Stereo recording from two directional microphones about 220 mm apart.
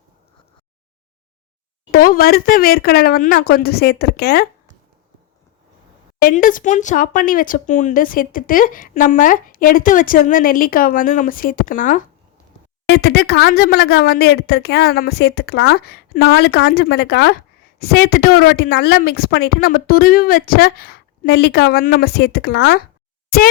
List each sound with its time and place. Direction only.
1.9 s a woman's voice: 40° left (ahead or behind)
6.2 s a woman's voice: 40° left (ahead or behind)